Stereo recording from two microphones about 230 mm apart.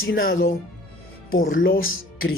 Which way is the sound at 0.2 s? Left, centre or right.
Left.